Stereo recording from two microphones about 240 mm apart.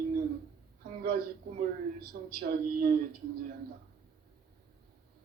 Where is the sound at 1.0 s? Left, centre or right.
Right.